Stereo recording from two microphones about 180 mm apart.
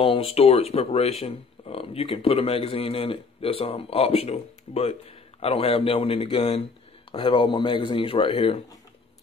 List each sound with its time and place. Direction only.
0.0 s speech: 30° left (ahead or behind)